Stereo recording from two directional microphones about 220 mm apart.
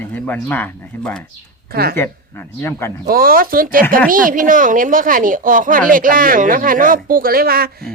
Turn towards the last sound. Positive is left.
turn(degrees=-45)  # may be behind; listen again after turning